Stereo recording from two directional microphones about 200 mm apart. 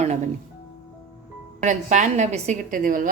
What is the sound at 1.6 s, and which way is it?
A woman's voice, 35° right (ahead or behind).